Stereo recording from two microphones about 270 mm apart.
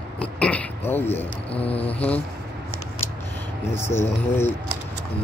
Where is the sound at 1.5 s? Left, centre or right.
Left.